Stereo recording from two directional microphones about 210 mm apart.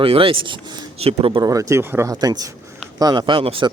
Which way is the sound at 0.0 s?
25° right (ahead or behind).